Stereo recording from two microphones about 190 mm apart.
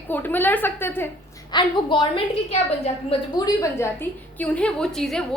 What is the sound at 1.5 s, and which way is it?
Speech, 25° left (ahead or behind).